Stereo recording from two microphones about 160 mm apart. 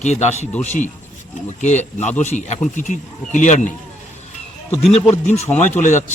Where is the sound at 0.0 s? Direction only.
45° left (ahead or behind).